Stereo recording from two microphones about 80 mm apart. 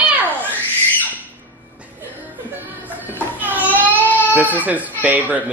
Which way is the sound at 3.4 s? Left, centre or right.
Right.